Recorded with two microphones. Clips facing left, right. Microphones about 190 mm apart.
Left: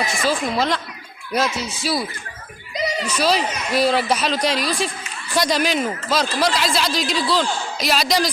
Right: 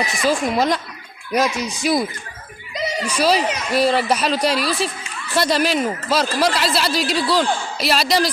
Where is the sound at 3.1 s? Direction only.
10° right (ahead or behind).